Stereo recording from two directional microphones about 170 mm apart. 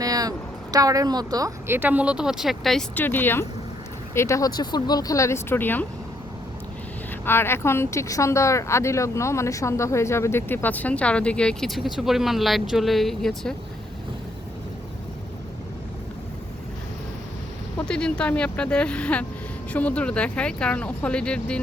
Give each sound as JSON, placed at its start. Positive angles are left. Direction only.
{"t": 0.0, "sound": "a woman's voice", "side_deg": -20}
{"t": 7.3, "sound": "speech", "side_deg": 15}
{"t": 17.8, "sound": "speech", "side_deg": 5}